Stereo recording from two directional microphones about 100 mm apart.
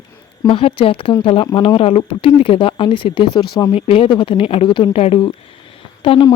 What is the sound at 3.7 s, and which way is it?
Speech, 70° left (ahead or behind).